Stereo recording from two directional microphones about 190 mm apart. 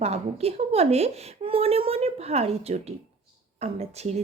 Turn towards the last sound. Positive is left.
turn(degrees=-35)  # may be behind; listen again after turning